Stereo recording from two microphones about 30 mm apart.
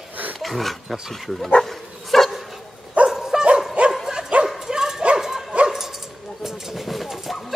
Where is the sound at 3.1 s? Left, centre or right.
Centre.